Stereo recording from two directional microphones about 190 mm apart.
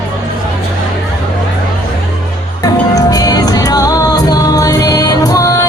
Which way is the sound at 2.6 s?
20° left (ahead or behind).